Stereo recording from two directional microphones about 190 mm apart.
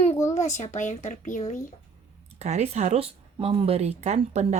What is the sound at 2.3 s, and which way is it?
Speech, 35° right (ahead or behind).